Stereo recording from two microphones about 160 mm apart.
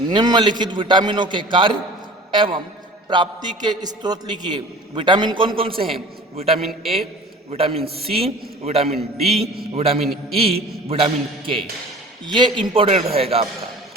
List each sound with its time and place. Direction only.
0.1 s a man's voice: 25° right (ahead or behind)
6.6 s a man's voice: centre (ahead or behind)
7.5 s a man's voice: 40° right (ahead or behind)
10.0 s a man's voice: centre (ahead or behind)
10.4 s a man's voice: 35° right (ahead or behind)